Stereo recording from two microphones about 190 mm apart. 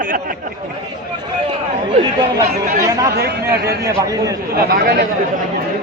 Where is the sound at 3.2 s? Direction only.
55° right (ahead or behind).